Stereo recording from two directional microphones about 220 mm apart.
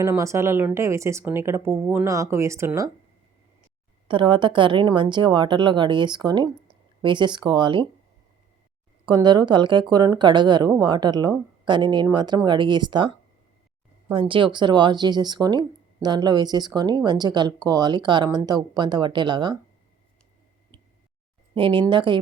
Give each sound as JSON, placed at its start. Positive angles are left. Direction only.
{"t": 0.0, "sound": "a woman's voice", "side_deg": -15}
{"t": 4.1, "sound": "speech", "side_deg": -20}
{"t": 9.0, "sound": "speech", "side_deg": -20}
{"t": 21.5, "sound": "speech", "side_deg": -25}